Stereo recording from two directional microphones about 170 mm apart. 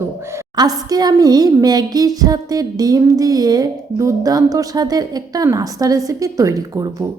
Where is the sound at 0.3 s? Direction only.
20° right (ahead or behind).